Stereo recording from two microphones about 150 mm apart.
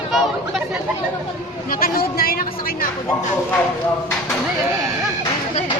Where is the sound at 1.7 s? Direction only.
75° left (ahead or behind).